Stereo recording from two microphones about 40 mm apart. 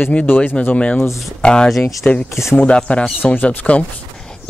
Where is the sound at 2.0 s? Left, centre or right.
Left.